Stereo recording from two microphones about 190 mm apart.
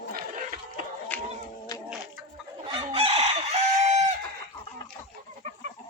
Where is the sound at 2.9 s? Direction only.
30° right (ahead or behind).